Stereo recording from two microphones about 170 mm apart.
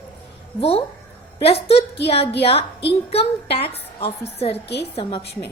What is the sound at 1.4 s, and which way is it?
A woman's voice, 35° left (ahead or behind).